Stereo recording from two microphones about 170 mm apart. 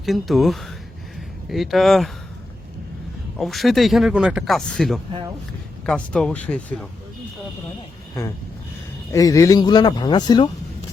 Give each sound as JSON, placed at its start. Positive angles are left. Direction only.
{"t": 0.0, "sound": "speech", "side_deg": 0}
{"t": 3.3, "sound": "speech", "side_deg": 0}
{"t": 9.1, "sound": "speech", "side_deg": 20}